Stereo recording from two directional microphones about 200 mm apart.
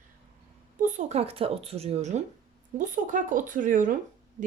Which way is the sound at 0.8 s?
35° right (ahead or behind).